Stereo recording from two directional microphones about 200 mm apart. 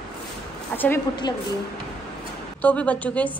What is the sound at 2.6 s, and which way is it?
Speech, 5° left (ahead or behind).